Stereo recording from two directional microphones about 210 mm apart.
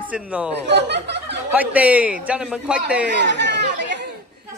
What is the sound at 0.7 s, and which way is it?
Speech, 55° right (ahead or behind).